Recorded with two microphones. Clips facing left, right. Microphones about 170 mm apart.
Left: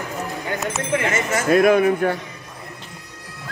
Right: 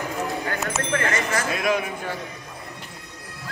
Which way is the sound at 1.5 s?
55° left (ahead or behind).